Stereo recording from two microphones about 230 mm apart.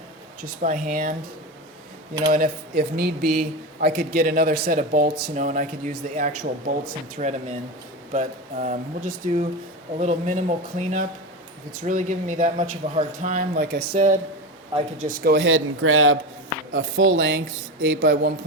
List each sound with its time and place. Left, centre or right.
0.6 s speech: right
2.3 s speech: right
14.7 s speech: right
15.2 s speech: right